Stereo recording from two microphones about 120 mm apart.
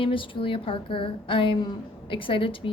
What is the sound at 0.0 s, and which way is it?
A woman's voice, 45° left (ahead or behind).